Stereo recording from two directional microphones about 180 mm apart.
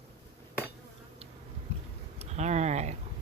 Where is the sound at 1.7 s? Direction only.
35° right (ahead or behind).